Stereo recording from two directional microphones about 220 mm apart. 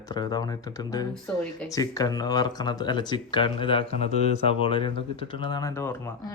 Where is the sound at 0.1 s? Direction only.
20° left (ahead or behind).